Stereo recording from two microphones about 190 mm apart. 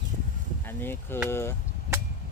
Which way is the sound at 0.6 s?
10° left (ahead or behind).